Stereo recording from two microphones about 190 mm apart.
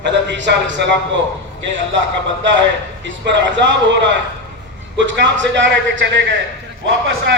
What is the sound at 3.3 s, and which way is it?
Speech, 70° right (ahead or behind).